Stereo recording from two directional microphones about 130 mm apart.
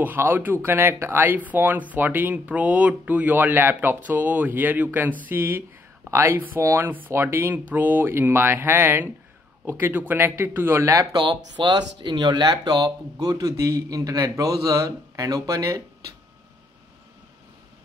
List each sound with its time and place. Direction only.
0.0 s speech: 15° right (ahead or behind)